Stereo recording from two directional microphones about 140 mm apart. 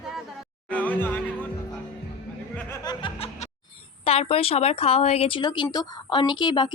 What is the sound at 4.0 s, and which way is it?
Speech, 45° left (ahead or behind).